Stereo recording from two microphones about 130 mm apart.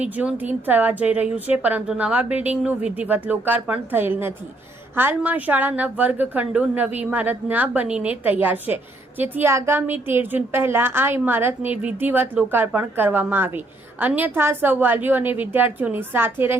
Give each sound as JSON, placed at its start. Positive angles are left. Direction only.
{"t": 0.0, "sound": "a woman's voice", "side_deg": -10}